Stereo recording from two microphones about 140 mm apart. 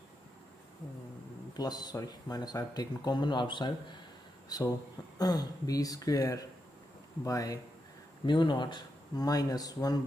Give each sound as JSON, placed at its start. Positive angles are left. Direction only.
{"t": 1.6, "sound": "speech", "side_deg": 30}